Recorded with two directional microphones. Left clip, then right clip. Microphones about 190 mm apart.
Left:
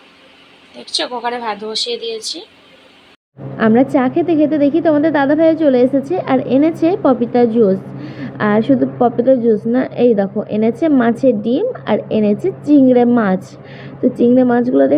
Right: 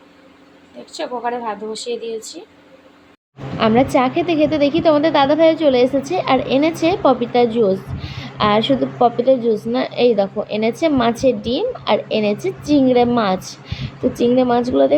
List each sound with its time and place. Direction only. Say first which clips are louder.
0.9 s a woman's voice: left 3 dB; centre (ahead or behind)
3.6 s a woman's voice: left 1 dB; 20° left (ahead or behind)